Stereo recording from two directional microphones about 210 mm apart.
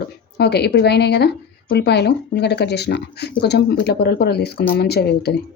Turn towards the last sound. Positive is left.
turn(degrees=50)  # may be behind; listen again after turning